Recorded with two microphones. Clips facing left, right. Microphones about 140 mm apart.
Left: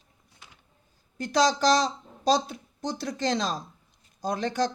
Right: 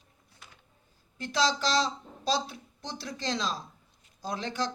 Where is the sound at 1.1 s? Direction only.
40° left (ahead or behind).